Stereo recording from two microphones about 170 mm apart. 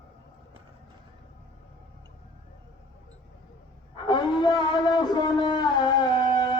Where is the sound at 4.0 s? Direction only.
25° left (ahead or behind).